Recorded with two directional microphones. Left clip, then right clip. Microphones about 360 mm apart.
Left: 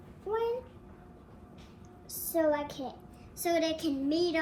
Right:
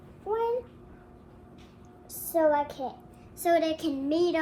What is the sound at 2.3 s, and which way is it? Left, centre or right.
A child's voice, centre.